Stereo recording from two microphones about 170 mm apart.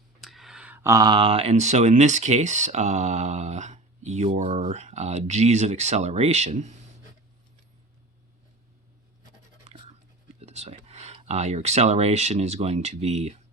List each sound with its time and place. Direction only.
0.2 s speech: centre (ahead or behind); by 6.7 s 40° right (ahead or behind)
9.6 s a sound: 35° right (ahead or behind)
10.4 s speech: 40° right (ahead or behind)